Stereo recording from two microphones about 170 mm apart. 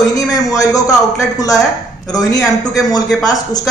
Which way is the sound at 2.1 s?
20° left (ahead or behind).